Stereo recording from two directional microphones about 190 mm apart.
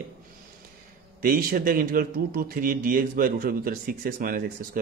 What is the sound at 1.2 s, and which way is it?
Speech, 50° right (ahead or behind).